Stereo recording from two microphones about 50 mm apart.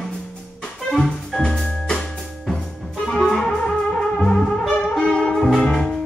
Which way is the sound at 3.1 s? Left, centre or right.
Centre.